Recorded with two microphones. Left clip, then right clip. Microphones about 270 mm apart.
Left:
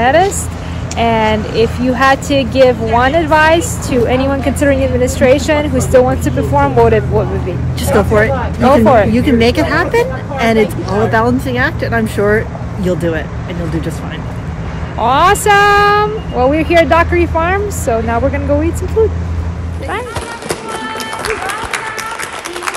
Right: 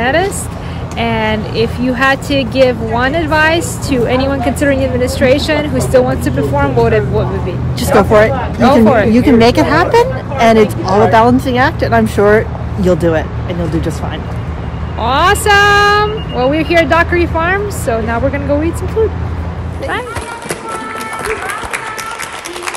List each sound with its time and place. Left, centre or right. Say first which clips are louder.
0.0 s speech: left 3 dB; centre
8.6 s speech: left 1 dB; centre
9.1 s speech: right 3 dB; right
15.0 s speech: left 1 dB; centre